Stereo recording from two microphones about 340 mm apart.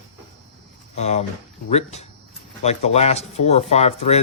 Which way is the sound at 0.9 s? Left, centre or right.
Centre.